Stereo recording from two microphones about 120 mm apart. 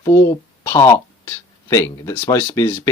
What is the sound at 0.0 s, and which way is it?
Speech, 25° left (ahead or behind).